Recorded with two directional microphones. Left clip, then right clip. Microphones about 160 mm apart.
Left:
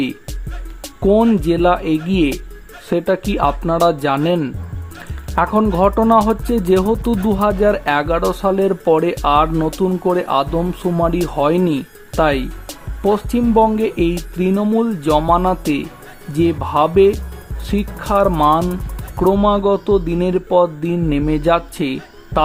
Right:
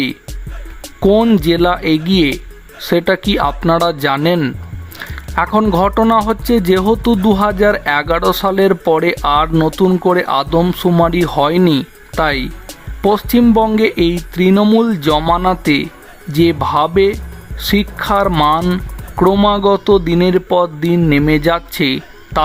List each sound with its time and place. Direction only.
1.0 s speech: 10° right (ahead or behind)